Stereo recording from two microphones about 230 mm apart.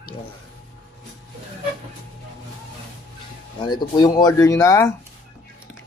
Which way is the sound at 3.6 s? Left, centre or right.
Centre.